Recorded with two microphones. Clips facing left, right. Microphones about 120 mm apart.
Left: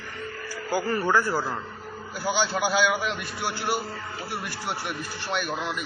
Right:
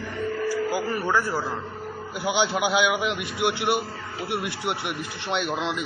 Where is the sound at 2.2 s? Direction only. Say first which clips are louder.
Right 2 dB; 20° right (ahead or behind).